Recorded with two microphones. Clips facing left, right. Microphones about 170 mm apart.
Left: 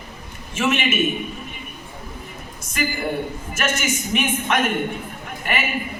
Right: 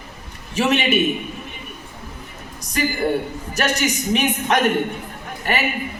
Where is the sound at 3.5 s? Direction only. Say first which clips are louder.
Right 4 dB; 35° right (ahead or behind).